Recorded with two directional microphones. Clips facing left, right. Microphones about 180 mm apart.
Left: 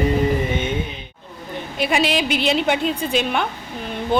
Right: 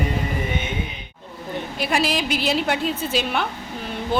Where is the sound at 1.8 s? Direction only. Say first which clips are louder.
Left 3 dB; centre (ahead or behind).